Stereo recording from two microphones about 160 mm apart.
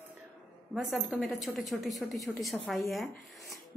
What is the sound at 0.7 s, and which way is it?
Speech, centre (ahead or behind).